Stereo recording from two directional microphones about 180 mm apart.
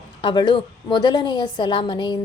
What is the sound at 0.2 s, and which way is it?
A woman's voice, 25° left (ahead or behind).